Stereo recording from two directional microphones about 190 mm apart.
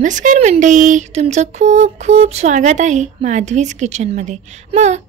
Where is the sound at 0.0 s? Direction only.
40° right (ahead or behind).